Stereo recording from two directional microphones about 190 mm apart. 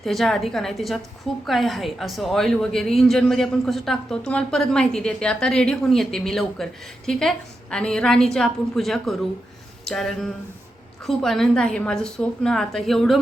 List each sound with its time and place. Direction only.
0.0 s a woman's voice: centre (ahead or behind)